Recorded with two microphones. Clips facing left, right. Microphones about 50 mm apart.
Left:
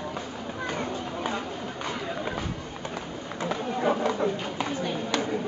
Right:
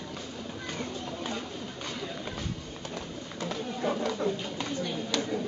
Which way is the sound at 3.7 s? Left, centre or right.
Left.